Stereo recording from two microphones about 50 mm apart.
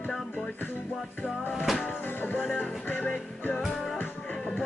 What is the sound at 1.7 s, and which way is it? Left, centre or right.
Music, left.